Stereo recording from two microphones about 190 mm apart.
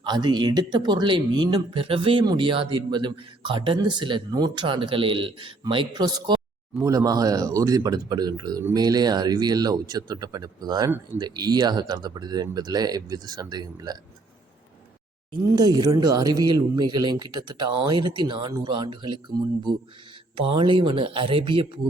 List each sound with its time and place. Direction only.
0.0 s a man's voice: 25° right (ahead or behind)
15.3 s a man's voice: 20° right (ahead or behind)
20.3 s a man's voice: 25° right (ahead or behind)